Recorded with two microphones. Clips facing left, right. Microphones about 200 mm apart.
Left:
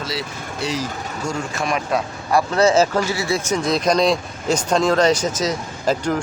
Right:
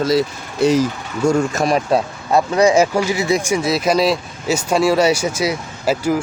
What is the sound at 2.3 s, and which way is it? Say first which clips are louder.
Speech: right 2 dB; 15° right (ahead or behind).